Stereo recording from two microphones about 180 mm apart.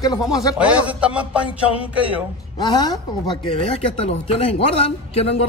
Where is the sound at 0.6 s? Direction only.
5° right (ahead or behind).